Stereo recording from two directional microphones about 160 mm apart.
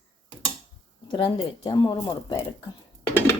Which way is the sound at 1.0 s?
30° left (ahead or behind).